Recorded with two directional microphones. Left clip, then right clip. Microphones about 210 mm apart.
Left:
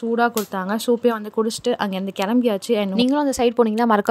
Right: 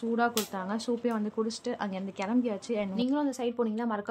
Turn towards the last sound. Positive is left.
turn(degrees=45)  # may be behind; listen again after turning